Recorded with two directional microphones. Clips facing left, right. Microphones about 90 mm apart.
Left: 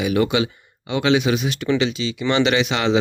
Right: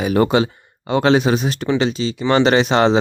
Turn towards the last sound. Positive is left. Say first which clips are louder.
# right 5 dB
turn(degrees=-35)  # may be behind; listen again after turning